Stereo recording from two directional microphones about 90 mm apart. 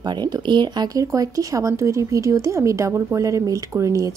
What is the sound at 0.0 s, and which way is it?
Speech, 55° right (ahead or behind).